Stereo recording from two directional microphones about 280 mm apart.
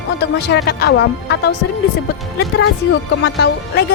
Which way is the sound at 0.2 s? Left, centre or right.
Left.